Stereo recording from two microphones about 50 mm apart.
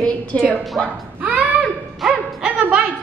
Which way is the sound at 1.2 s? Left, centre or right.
Right.